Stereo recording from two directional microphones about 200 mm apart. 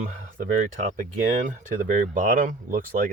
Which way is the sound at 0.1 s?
35° right (ahead or behind).